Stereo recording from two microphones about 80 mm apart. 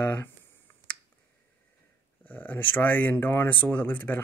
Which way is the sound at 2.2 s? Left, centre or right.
Left.